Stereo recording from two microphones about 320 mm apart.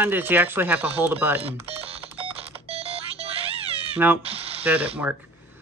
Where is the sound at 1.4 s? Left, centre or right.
Centre.